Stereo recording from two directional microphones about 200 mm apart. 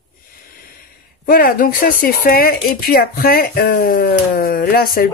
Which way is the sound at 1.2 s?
45° left (ahead or behind).